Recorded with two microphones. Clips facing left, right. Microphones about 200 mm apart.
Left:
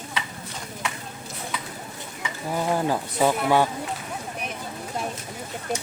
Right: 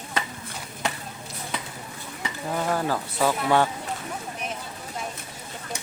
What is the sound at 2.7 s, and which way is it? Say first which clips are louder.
Speech: left 3 dB; 20° left (ahead or behind).